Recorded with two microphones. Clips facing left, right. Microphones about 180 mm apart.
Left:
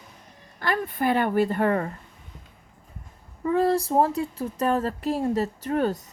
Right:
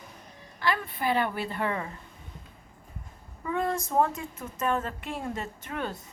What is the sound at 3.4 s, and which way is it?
A woman's voice, 35° left (ahead or behind).